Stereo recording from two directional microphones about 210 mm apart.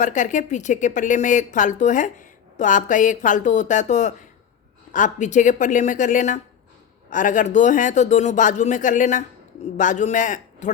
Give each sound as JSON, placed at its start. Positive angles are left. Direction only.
{"t": 0.0, "sound": "a man's voice", "side_deg": 35}